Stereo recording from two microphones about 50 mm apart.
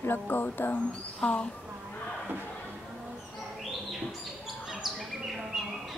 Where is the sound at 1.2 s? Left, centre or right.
Left.